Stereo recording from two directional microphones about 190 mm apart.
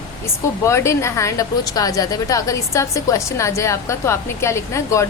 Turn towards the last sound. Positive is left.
turn(degrees=15)  # may be behind; listen again after turning